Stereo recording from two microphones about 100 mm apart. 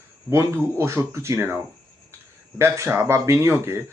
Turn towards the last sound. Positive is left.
turn(degrees=-25)  # may be behind; listen again after turning